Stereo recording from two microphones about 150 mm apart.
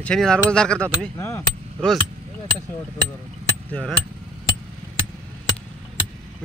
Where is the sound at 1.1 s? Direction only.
15° left (ahead or behind).